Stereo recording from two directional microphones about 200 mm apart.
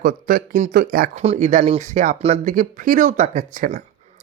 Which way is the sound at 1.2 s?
35° right (ahead or behind).